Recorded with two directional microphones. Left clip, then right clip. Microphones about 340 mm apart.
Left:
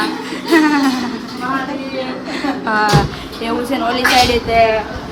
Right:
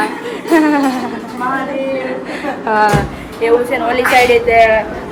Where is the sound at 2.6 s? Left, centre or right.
Centre.